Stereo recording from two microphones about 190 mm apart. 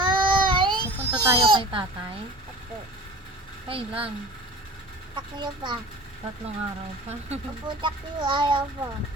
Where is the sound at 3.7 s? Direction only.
30° right (ahead or behind).